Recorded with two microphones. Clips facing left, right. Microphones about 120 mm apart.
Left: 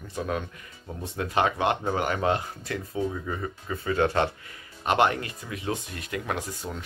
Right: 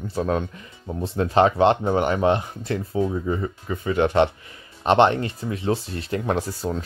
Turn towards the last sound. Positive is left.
turn(degrees=-35)  # may be behind; listen again after turning